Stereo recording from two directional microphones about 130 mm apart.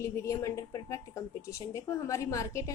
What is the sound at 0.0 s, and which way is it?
A woman's voice, 25° left (ahead or behind).